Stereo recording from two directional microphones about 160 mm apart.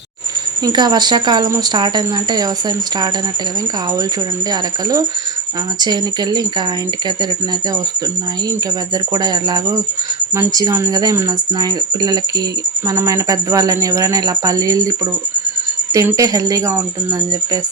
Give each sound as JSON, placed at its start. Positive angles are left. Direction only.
{"t": 0.6, "sound": "speech", "side_deg": -25}
{"t": 5.8, "sound": "speech", "side_deg": -25}
{"t": 9.1, "sound": "speech", "side_deg": -25}